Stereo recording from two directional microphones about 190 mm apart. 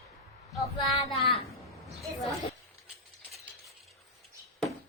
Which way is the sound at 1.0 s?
30° left (ahead or behind).